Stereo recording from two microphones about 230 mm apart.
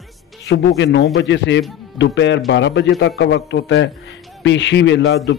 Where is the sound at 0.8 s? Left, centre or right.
Left.